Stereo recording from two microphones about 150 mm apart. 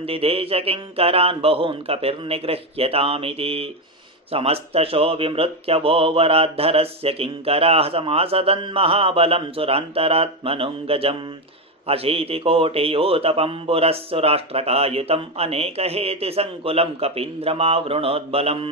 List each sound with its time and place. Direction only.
0.0 s speech: 40° right (ahead or behind)